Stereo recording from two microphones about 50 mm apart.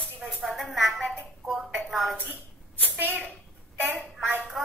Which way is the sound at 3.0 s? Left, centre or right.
Right.